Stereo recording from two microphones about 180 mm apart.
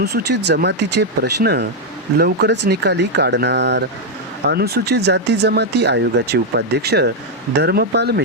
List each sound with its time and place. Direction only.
0.0 s speech: 65° right (ahead or behind)
4.4 s speech: 60° right (ahead or behind)